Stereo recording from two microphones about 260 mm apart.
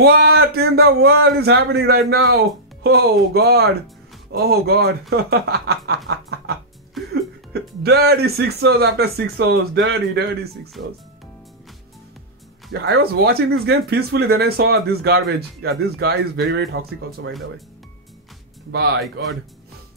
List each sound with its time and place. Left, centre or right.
0.0 s speech: right
7.8 s speech: right
12.8 s speech: right
18.7 s speech: right